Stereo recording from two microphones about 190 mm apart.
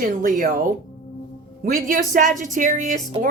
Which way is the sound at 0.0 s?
45° right (ahead or behind).